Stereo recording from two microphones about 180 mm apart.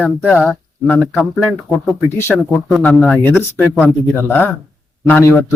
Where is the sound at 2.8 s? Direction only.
5° left (ahead or behind).